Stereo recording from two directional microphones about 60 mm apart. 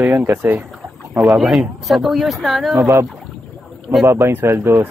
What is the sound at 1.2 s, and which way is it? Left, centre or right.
Speech, centre.